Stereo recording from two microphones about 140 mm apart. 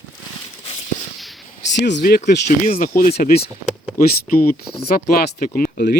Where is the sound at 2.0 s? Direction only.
80° left.